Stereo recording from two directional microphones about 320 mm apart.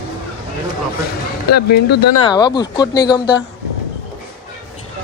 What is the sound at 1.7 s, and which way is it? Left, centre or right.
Speech, left.